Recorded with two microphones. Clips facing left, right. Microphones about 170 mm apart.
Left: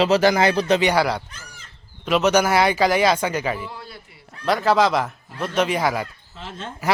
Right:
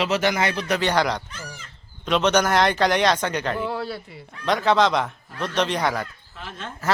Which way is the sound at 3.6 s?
70° right (ahead or behind).